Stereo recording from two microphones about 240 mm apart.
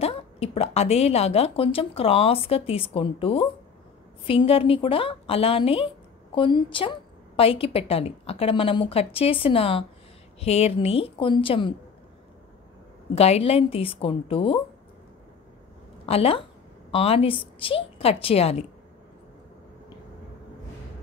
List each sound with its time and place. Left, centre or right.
0.0 s a woman's voice: left
13.1 s a woman's voice: left
16.1 s a woman's voice: left